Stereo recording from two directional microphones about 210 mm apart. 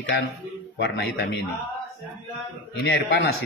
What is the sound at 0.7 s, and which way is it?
Speech, 50° left (ahead or behind).